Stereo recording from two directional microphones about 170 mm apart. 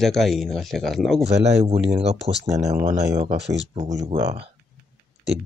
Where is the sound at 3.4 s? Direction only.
90° right.